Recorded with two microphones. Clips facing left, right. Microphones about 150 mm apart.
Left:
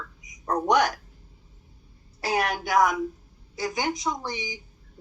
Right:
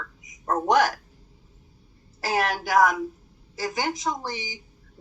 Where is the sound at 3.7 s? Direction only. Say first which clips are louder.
Right 1 dB; centre (ahead or behind).